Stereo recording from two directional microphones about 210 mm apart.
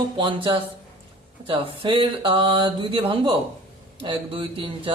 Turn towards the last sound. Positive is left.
turn(degrees=-25)  # may be behind; listen again after turning